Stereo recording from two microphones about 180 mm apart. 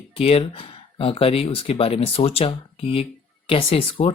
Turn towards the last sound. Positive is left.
turn(degrees=30)  # may be behind; listen again after turning